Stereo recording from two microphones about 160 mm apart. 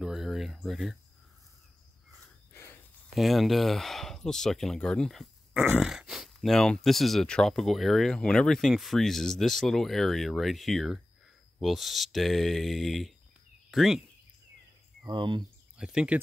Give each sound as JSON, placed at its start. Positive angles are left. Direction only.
{"t": 0.0, "sound": "speech", "side_deg": 0}
{"t": 3.2, "sound": "speech", "side_deg": 0}
{"t": 15.0, "sound": "speech", "side_deg": -30}
{"t": 15.8, "sound": "speech", "side_deg": -5}